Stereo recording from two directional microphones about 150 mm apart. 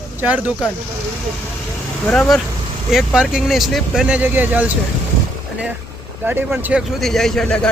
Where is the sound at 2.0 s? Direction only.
5° left (ahead or behind); by 4.7 s 10° right (ahead or behind).